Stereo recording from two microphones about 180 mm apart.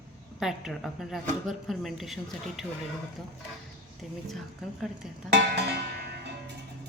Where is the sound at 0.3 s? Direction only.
Centre (ahead or behind).